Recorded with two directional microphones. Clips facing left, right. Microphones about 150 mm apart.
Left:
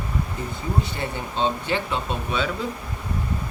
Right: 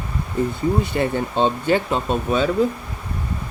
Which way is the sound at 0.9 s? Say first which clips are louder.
Right 9 dB; 60° right (ahead or behind).